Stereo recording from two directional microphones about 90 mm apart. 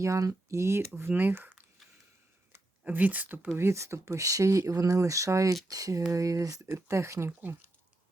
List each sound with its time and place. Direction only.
0.0 s speech: 35° right (ahead or behind)
1.8 s a sound: centre (ahead or behind)
2.8 s speech: 15° right (ahead or behind)
3.7 s speech: 30° right (ahead or behind)